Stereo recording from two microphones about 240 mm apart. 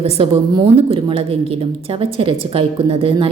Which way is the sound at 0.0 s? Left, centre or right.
Right.